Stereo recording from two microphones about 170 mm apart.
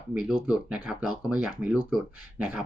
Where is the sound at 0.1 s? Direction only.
5° right (ahead or behind).